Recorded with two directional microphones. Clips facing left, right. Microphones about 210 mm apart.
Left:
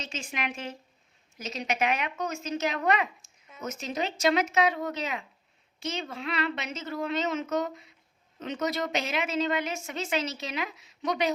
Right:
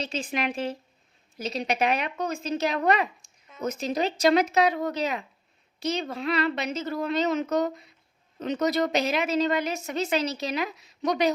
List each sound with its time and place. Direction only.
0.0 s a woman's voice: 35° right (ahead or behind)